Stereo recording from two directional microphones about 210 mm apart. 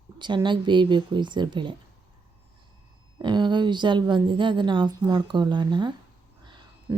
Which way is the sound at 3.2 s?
20° right (ahead or behind).